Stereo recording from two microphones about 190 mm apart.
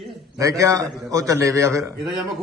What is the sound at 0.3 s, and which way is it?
A man's voice, 15° right (ahead or behind).